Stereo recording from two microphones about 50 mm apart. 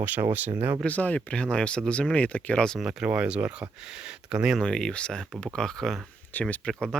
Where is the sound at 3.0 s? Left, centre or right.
Right.